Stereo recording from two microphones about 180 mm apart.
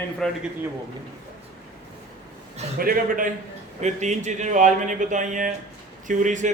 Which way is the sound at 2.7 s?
50° right (ahead or behind).